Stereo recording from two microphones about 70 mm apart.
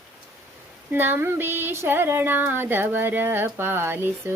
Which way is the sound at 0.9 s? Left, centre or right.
Right.